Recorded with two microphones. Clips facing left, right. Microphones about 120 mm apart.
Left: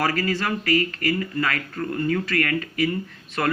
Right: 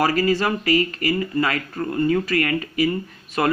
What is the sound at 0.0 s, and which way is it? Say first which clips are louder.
Speech: right 5 dB; 20° right (ahead or behind).